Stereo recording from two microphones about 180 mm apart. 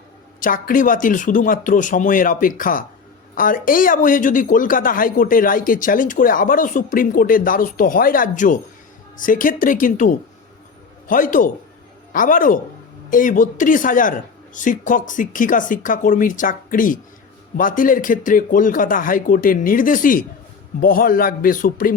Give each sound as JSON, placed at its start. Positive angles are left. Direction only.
{"t": 0.3, "sound": "speech", "side_deg": 50}